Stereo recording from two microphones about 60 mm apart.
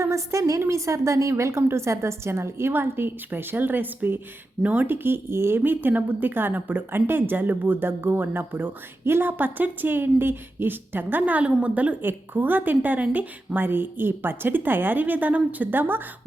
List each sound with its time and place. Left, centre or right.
0.0 s a woman's voice: right
4.6 s speech: right
5.0 s speech: right
12.0 s speech: right